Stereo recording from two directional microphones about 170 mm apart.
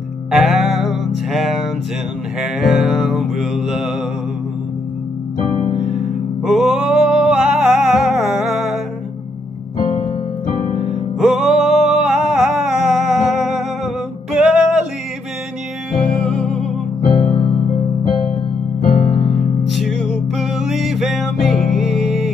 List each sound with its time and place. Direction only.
0.3 s music: centre (ahead or behind)
5.9 s music: 5° right (ahead or behind)
9.8 s keyboard: 50° left (ahead or behind)
10.9 s music: centre (ahead or behind)
16.0 s music: centre (ahead or behind)
18.9 s piano: 35° left (ahead or behind)
19.7 s music: centre (ahead or behind)